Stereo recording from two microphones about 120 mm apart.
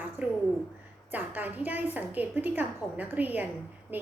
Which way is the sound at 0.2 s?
15° right (ahead or behind).